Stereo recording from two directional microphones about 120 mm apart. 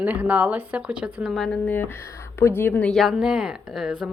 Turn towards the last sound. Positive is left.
turn(degrees=-5)  # may be behind; listen again after turning